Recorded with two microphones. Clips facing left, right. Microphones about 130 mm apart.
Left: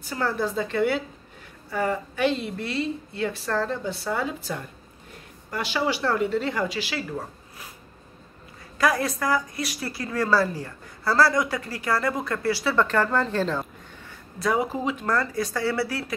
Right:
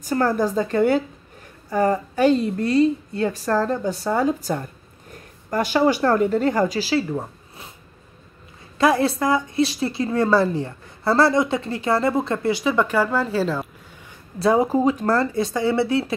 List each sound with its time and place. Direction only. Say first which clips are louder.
0.0 s a woman's voice: right 6 dB; 45° right (ahead or behind)
7.1 s zipper: right 5 dB; 25° right (ahead or behind)
8.7 s speech: right 5 dB; 25° right (ahead or behind); by 13.7 s 5° right (ahead or behind)
14.4 s speech: right 7 dB; 35° right (ahead or behind)